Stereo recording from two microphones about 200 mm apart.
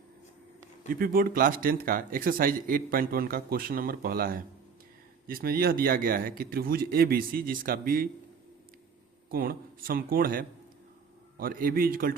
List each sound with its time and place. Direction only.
0.9 s speech: 45° right (ahead or behind)
9.3 s speech: 45° right (ahead or behind)